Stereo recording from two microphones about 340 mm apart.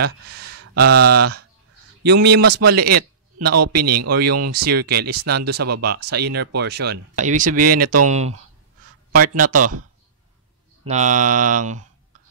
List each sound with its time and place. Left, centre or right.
0.0 s speech: right
10.9 s speech: right